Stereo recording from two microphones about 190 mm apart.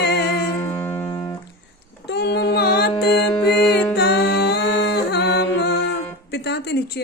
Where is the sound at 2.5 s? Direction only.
55° left (ahead or behind).